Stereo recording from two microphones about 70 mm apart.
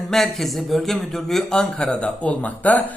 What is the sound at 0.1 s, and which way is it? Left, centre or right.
A man's voice, centre.